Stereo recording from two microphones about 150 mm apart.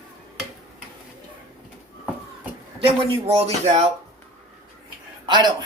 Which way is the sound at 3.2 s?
40° right (ahead or behind).